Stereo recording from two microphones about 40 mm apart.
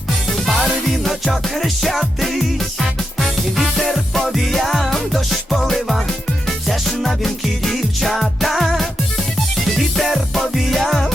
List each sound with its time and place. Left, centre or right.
0.4 s music: centre
10.0 s music: centre